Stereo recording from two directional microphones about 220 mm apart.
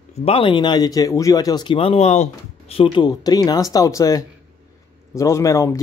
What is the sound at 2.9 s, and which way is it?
Speech, 20° left (ahead or behind).